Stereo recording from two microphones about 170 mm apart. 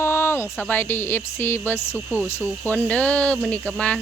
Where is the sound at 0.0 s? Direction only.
15° left (ahead or behind).